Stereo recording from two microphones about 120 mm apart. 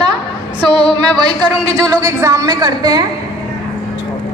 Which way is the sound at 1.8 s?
25° right (ahead or behind).